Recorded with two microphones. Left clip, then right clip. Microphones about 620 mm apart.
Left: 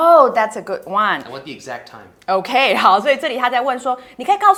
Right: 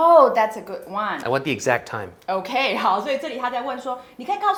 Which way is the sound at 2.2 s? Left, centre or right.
Left.